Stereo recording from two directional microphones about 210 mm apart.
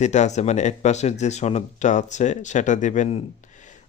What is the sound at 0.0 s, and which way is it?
Speech, 35° left (ahead or behind).